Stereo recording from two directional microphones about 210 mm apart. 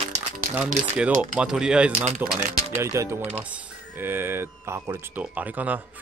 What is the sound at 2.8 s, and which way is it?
Speech, 15° right (ahead or behind).